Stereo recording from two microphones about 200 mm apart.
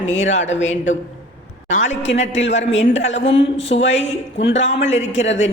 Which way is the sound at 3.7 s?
65° left (ahead or behind).